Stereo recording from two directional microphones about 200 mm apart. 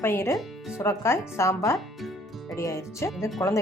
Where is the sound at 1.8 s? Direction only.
Centre (ahead or behind).